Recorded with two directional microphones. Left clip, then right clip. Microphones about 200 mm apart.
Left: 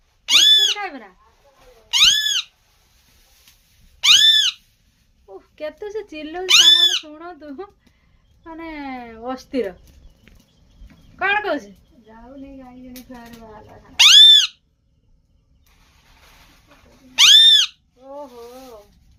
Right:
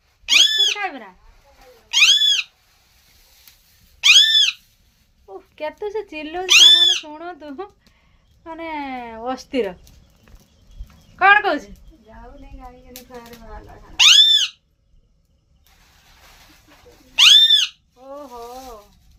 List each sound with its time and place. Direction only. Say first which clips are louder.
0.3 s cat: left 2 dB; 20° left (ahead or behind)
0.8 s speech: right 2 dB; 5° right (ahead or behind)
1.9 s cat: right 1 dB; 25° left (ahead or behind)
4.0 s cat: right 1 dB; 25° left (ahead or behind)
5.2 s speech: right 2 dB; 5° right (ahead or behind)
6.4 s speech: right 1 dB; 10° left (ahead or behind)
7.0 s speech: right 3 dB; 5° right (ahead or behind)
11.2 s speech: right 6 dB; 10° right (ahead or behind)
13.9 s a sound: left 3 dB; 20° left (ahead or behind)
17.2 s cat: left 1 dB; 20° left (ahead or behind)